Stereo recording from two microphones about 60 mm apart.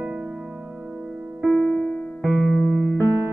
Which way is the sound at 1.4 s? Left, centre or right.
Centre.